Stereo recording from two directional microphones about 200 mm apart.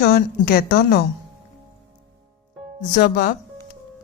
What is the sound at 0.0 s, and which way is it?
A woman's voice, 50° left (ahead or behind).